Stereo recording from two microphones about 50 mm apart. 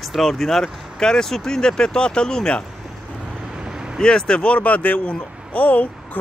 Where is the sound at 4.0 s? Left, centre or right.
Centre.